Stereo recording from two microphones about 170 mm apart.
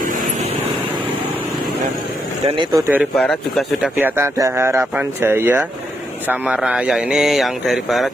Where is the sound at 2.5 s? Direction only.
30° right (ahead or behind).